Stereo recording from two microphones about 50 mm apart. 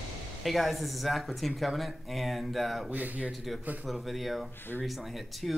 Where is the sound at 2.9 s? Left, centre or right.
Right.